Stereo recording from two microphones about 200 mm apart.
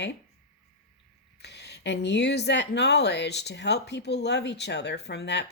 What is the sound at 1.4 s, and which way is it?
Speech, 55° left (ahead or behind).